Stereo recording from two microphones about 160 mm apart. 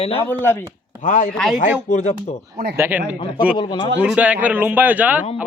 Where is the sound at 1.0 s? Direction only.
55° left (ahead or behind).